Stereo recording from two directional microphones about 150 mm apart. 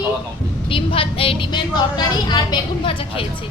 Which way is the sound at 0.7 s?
35° left (ahead or behind).